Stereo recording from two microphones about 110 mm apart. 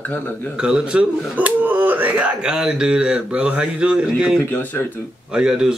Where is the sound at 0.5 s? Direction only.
10° right (ahead or behind).